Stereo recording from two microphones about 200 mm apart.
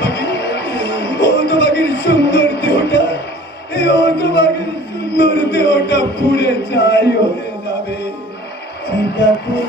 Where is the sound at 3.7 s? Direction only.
60° left (ahead or behind).